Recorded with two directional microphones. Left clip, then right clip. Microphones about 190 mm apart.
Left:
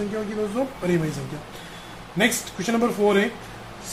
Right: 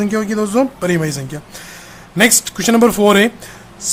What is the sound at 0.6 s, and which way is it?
Speech, 50° right (ahead or behind).